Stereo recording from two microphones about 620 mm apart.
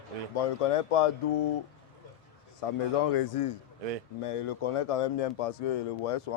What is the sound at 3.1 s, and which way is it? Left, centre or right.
A man's voice, left.